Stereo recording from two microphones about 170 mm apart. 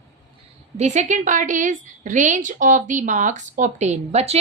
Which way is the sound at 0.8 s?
45° right (ahead or behind).